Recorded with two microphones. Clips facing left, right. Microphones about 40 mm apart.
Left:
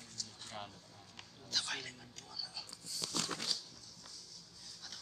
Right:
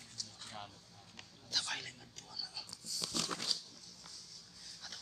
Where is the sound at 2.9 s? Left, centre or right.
Centre.